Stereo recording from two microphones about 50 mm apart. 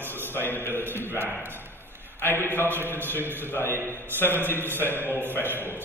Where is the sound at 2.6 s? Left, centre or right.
Right.